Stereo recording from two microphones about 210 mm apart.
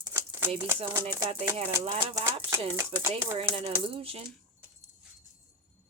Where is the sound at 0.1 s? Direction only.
10° right (ahead or behind).